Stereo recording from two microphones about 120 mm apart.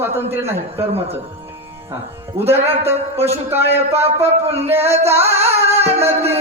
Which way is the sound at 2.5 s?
20° right (ahead or behind).